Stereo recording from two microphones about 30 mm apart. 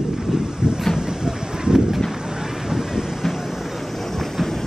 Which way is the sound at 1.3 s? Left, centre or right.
Centre.